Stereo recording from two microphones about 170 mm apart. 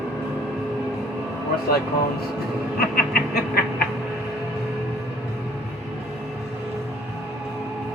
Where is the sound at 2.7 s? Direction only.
60° left (ahead or behind).